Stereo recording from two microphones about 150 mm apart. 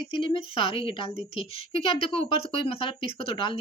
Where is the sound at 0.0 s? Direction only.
35° left (ahead or behind).